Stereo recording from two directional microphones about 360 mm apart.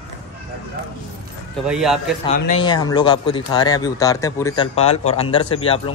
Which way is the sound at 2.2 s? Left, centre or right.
Centre.